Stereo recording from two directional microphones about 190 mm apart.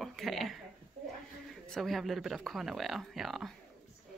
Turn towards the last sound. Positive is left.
turn(degrees=0)  # may be behind; listen again after turning